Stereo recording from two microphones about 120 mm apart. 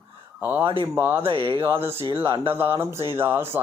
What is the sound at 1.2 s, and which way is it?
Speech, 45° right (ahead or behind).